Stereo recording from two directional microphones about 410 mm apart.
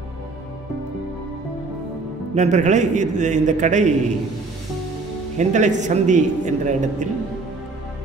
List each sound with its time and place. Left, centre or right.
2.3 s a man's voice: centre
5.4 s a man's voice: centre